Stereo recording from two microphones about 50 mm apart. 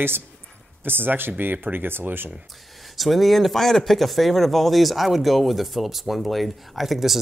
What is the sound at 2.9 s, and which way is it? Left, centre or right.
Speech, centre.